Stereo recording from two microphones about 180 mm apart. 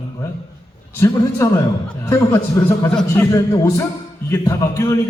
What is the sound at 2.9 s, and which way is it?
Speech, 5° left (ahead or behind).